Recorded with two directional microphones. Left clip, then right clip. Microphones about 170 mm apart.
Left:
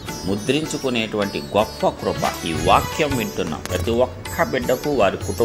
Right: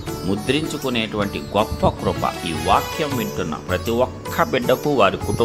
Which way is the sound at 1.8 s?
15° right (ahead or behind).